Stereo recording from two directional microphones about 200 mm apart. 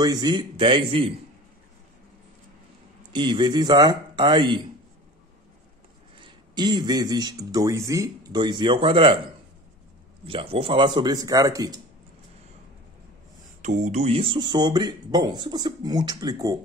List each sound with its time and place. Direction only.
0.0 s speech: 20° right (ahead or behind)
3.1 s speech: 25° right (ahead or behind)
6.1 s speech: 20° right (ahead or behind)
13.6 s speech: 35° right (ahead or behind); by 16.5 s 20° right (ahead or behind)